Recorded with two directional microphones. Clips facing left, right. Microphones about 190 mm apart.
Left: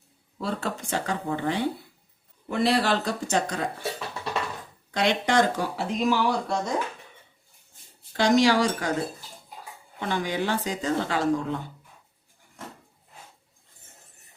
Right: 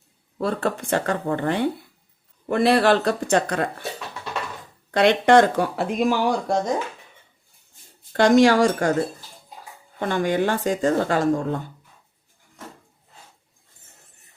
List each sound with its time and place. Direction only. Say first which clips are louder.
0.3 s speech: right 6 dB; 55° right (ahead or behind)
4.9 s speech: right 8 dB; 60° right (ahead or behind)
8.1 s speech: right 5 dB; 55° right (ahead or behind)
10.0 s speech: right 6 dB; 50° right (ahead or behind)